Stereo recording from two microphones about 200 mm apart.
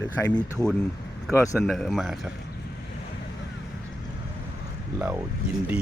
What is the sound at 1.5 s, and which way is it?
Speech, centre (ahead or behind).